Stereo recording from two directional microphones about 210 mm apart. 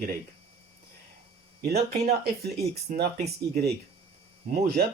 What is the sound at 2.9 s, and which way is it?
Speech, 40° right (ahead or behind).